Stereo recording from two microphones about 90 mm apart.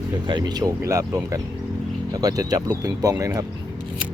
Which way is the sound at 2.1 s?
45° right (ahead or behind).